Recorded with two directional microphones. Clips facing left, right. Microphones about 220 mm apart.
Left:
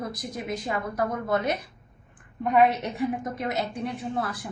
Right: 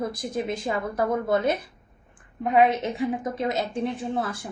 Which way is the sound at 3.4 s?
25° right (ahead or behind).